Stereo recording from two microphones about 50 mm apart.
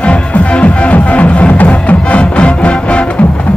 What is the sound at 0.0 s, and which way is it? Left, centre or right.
Music, left.